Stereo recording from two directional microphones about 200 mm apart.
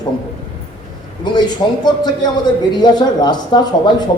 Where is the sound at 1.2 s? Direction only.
20° left (ahead or behind).